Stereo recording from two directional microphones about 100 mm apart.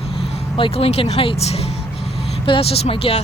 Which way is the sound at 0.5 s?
70° left (ahead or behind).